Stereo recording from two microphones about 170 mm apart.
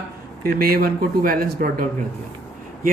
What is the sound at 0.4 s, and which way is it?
Speech, 60° right (ahead or behind).